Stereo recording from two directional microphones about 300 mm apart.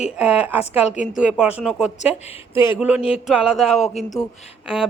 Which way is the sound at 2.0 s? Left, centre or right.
Centre.